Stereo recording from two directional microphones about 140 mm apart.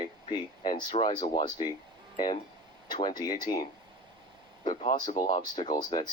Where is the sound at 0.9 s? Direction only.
35° left (ahead or behind).